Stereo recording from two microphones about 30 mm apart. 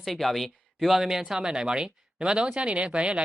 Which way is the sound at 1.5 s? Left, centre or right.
Right.